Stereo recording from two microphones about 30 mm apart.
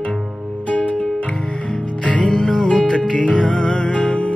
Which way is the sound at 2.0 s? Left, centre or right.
Left.